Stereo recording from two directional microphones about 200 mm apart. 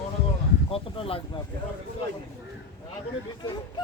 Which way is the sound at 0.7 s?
30° left (ahead or behind).